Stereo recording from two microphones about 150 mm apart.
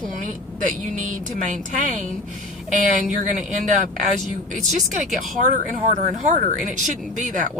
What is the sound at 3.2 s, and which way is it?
Speech, 55° right (ahead or behind).